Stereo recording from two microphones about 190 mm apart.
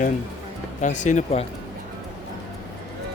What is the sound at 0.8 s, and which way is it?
Speech, 40° left (ahead or behind).